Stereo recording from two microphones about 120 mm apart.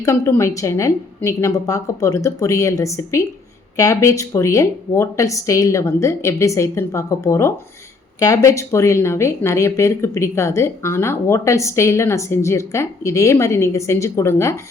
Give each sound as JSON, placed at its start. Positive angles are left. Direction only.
{"t": 0.0, "sound": "speech", "side_deg": 25}